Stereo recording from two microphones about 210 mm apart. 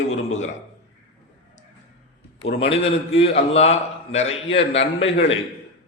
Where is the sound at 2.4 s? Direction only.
25° left (ahead or behind).